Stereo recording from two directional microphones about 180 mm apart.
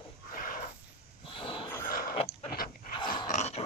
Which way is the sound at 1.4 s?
30° left (ahead or behind).